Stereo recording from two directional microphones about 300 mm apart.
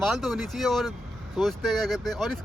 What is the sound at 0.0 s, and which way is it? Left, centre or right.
Speech, centre.